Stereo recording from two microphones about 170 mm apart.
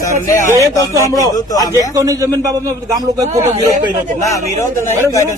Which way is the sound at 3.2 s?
45° right (ahead or behind).